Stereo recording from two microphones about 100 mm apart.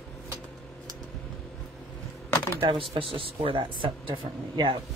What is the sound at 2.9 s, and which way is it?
Speech, 65° right (ahead or behind).